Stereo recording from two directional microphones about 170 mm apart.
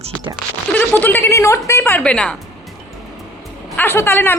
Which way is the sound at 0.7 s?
10° left (ahead or behind).